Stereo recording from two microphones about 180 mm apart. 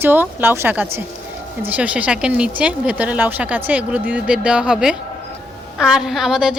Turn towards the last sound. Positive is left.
turn(degrees=-5)  # may be behind; listen again after turning